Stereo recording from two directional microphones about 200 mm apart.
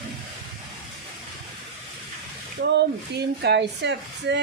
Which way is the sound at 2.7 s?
55° right (ahead or behind).